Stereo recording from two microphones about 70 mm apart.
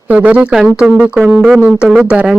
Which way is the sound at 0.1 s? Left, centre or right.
Centre.